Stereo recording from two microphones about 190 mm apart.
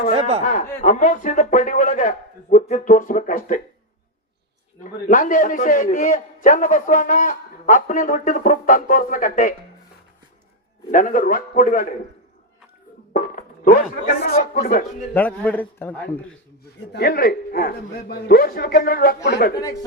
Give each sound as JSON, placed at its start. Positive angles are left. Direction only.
{"t": 0.1, "sound": "speech", "side_deg": -35}
{"t": 0.4, "sound": "a man's voice", "side_deg": 45}
{"t": 4.8, "sound": "a man's voice", "side_deg": 45}
{"t": 10.9, "sound": "a man's voice", "side_deg": 45}
{"t": 13.1, "sound": "a man's voice", "side_deg": 50}
{"t": 15.1, "sound": "a man's voice", "side_deg": 10}
{"t": 16.9, "sound": "a man's voice", "side_deg": 55}